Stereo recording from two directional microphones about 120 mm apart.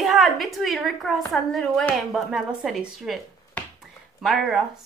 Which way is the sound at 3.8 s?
Centre (ahead or behind).